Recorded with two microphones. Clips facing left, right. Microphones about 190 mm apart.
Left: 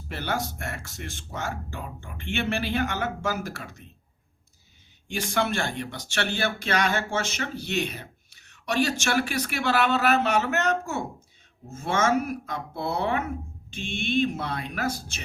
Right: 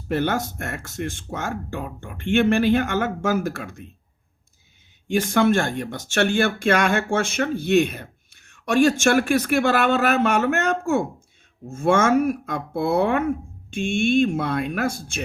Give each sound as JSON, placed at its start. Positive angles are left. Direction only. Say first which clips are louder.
{"t": 0.1, "sound": "speech", "louder": "right 7 dB", "side_deg": -50}
{"t": 5.0, "sound": "speech", "louder": "right 9 dB", "side_deg": -55}